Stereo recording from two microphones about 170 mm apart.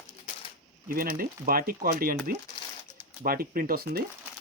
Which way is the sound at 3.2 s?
60° right (ahead or behind).